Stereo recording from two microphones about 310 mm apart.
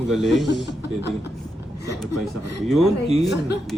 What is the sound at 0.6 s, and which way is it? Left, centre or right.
Speech, left.